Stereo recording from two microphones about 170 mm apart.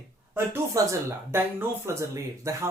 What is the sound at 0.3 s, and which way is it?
Speech, 15° right (ahead or behind).